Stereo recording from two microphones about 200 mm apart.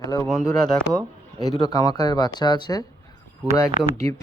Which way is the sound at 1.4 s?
20° left (ahead or behind).